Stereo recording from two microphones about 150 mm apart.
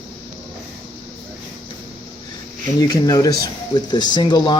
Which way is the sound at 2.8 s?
25° left (ahead or behind).